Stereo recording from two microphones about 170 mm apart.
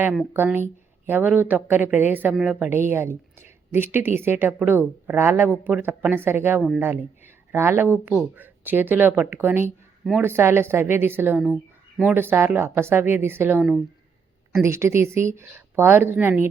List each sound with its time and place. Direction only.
0.3 s a woman's voice: 10° right (ahead or behind)